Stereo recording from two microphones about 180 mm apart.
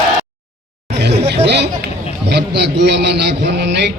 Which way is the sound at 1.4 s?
70° right (ahead or behind).